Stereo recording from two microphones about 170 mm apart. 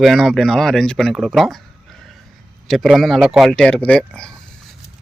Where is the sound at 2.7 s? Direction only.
Centre (ahead or behind).